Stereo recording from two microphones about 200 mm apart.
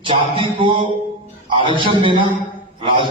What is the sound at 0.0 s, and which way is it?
A man's voice, 25° right (ahead or behind).